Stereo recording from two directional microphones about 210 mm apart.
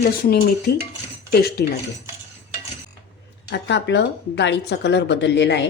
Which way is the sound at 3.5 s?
55° left (ahead or behind).